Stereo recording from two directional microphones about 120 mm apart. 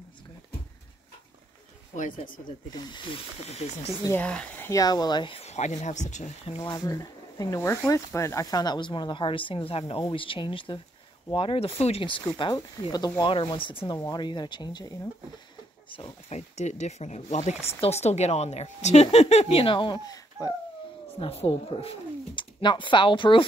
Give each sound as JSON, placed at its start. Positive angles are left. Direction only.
{"t": 2.4, "sound": "speech", "side_deg": 35}
{"t": 3.4, "sound": "speech", "side_deg": 60}
{"t": 4.1, "sound": "speech", "side_deg": 10}
{"t": 4.6, "sound": "speech", "side_deg": 30}
{"t": 5.4, "sound": "speech", "side_deg": 70}
{"t": 6.6, "sound": "speech", "side_deg": 35}
{"t": 12.3, "sound": "speech", "side_deg": 40}
{"t": 16.3, "sound": "speech", "side_deg": 65}
{"t": 21.2, "sound": "speech", "side_deg": 55}